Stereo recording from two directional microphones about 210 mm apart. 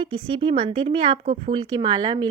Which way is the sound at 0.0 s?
25° right (ahead or behind).